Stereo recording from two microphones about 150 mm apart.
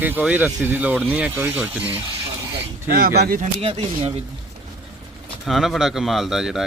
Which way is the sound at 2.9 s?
90° right.